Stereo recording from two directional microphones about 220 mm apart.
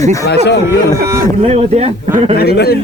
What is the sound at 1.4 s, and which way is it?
Speech, 30° right (ahead or behind).